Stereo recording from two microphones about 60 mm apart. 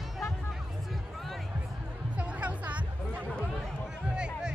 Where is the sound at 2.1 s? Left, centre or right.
Right.